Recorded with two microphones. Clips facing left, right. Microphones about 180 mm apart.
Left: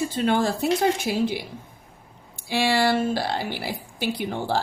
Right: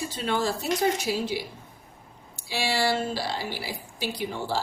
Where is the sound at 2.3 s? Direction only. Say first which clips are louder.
Left 6 dB; 55° left (ahead or behind).